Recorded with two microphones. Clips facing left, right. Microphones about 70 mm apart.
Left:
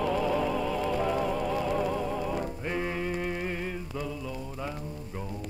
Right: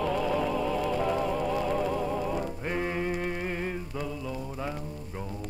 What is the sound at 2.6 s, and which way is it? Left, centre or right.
Mantra, centre.